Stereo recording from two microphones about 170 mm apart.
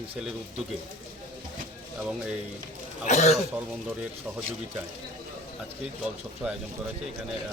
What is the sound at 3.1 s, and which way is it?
Speech, 40° left (ahead or behind).